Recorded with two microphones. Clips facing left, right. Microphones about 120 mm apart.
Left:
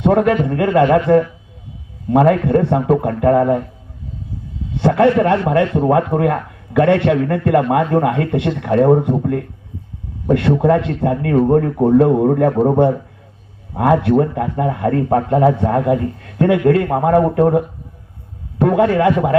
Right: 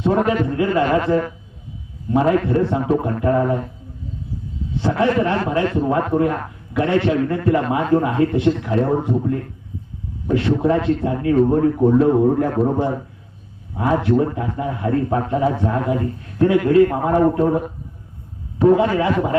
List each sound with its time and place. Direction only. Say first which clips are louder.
0.0 s a man's voice: left 4 dB; 65° left (ahead or behind)
4.8 s a man's voice: left 5 dB; 60° left (ahead or behind)
18.6 s a man's voice: left 2 dB; 65° left (ahead or behind)